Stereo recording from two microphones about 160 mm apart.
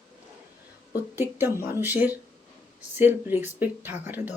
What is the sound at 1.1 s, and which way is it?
Speech, 15° right (ahead or behind).